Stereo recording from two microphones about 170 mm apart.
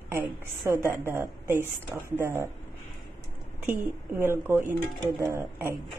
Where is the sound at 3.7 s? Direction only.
15° right (ahead or behind).